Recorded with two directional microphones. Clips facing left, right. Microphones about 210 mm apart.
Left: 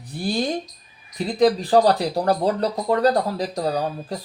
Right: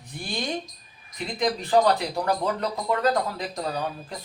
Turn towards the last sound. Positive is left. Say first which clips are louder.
# left 6 dB
turn(degrees=40)  # may be behind; listen again after turning